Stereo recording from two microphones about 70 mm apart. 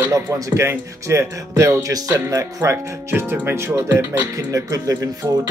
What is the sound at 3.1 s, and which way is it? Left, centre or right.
Speech, right.